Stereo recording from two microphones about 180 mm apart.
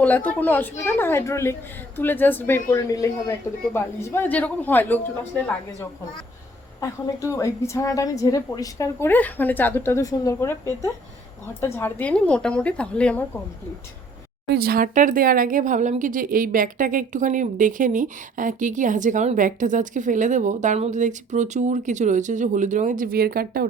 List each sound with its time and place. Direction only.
0.0 s a woman's voice: 10° left (ahead or behind)
7.2 s a woman's voice: 15° left (ahead or behind)
14.4 s speech: 60° right (ahead or behind)